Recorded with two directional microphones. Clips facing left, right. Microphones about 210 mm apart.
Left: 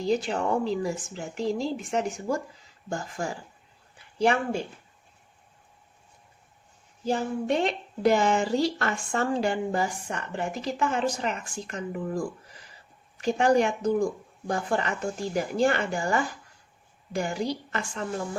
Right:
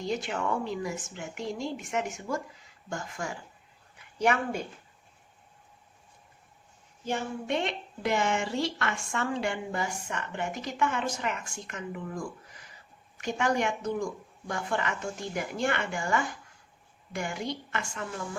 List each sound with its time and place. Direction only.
0.0 s a woman's voice: 35° left (ahead or behind)
7.0 s a woman's voice: 35° left (ahead or behind)